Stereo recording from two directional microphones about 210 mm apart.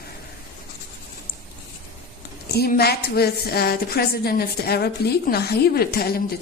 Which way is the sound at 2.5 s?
50° left (ahead or behind).